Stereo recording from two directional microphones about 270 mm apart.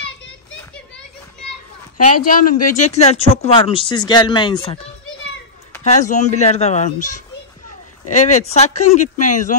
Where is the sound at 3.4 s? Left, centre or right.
Centre.